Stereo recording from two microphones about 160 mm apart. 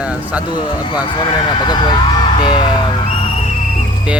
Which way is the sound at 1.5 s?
25° left (ahead or behind).